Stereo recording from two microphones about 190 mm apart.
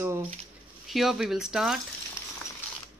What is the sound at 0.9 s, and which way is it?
Speech, centre (ahead or behind).